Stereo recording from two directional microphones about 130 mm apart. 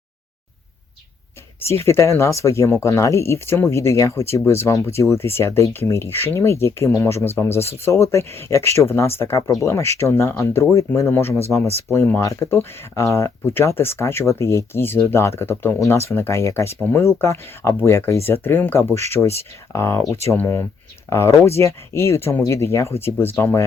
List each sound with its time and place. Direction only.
1.6 s speech: 20° left (ahead or behind)